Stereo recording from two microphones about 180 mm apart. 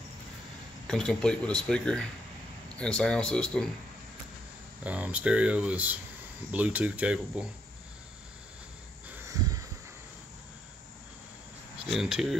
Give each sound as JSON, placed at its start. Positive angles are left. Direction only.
{"t": 0.8, "sound": "speech", "side_deg": 5}
{"t": 4.8, "sound": "speech", "side_deg": -10}
{"t": 9.3, "sound": "a sound", "side_deg": -20}
{"t": 11.8, "sound": "speech", "side_deg": -5}